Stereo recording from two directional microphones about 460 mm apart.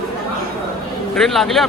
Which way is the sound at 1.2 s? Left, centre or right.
Centre.